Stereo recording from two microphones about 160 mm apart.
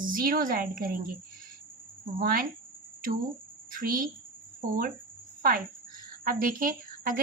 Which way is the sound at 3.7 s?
60° right (ahead or behind).